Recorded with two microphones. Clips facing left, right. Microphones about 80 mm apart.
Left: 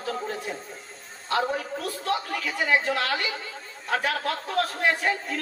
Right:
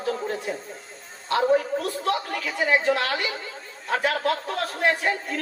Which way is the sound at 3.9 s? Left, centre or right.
Centre.